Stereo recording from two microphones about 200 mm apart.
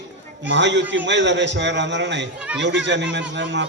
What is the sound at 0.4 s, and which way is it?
A man's voice, 65° right (ahead or behind).